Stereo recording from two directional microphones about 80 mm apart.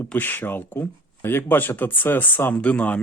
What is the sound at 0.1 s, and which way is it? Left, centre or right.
Speech, left.